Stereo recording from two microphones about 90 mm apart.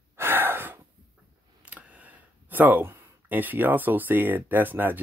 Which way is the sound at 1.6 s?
15° right (ahead or behind).